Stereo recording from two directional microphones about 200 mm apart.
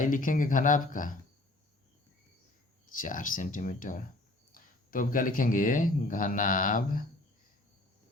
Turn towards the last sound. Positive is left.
turn(degrees=45)  # may be behind; listen again after turning